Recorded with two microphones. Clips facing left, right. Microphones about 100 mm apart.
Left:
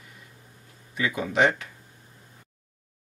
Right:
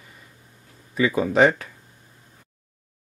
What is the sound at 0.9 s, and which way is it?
Speech, 35° right (ahead or behind).